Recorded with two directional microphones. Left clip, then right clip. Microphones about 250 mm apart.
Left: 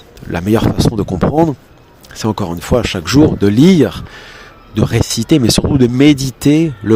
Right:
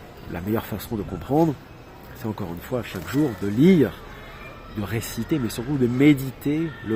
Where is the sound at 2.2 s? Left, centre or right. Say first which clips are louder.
Left 14 dB; left.